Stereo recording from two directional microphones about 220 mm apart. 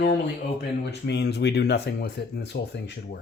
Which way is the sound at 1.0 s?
50° left (ahead or behind).